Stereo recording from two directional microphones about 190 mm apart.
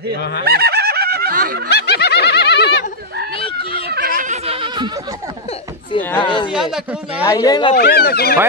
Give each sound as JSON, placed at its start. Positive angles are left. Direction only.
{"t": 0.5, "sound": "snicker", "side_deg": -55}
{"t": 1.7, "sound": "snicker", "side_deg": 60}
{"t": 3.3, "sound": "a sound", "side_deg": 30}
{"t": 3.8, "sound": "a sound", "side_deg": -55}
{"t": 4.2, "sound": "a sound", "side_deg": -35}
{"t": 5.9, "sound": "speech", "side_deg": 10}
{"t": 6.2, "sound": "speech", "side_deg": 25}
{"t": 6.5, "sound": "speech", "side_deg": -5}
{"t": 7.2, "sound": "speech", "side_deg": 20}
{"t": 7.7, "sound": "speech", "side_deg": 55}